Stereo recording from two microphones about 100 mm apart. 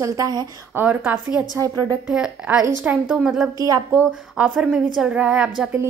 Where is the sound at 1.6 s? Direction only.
35° right (ahead or behind).